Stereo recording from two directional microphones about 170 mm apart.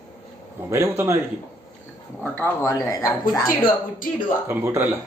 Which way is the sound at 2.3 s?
15° left (ahead or behind).